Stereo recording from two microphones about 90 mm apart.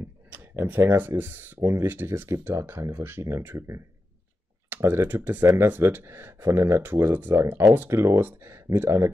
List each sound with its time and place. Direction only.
0.3 s speech: 25° right (ahead or behind)